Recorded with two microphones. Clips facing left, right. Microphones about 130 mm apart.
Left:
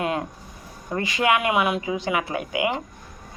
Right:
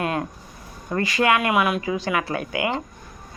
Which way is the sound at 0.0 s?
20° left (ahead or behind).